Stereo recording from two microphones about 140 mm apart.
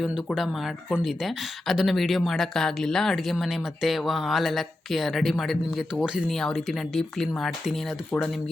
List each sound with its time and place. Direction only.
0.0 s speech: centre (ahead or behind)